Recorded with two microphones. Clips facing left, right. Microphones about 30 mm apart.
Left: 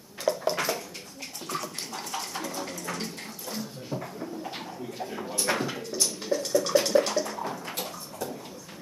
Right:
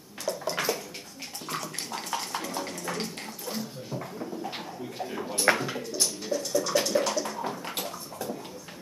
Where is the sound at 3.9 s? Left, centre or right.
Centre.